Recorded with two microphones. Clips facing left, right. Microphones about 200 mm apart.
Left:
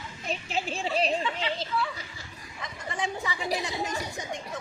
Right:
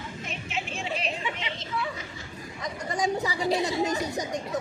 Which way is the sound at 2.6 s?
40° right (ahead or behind).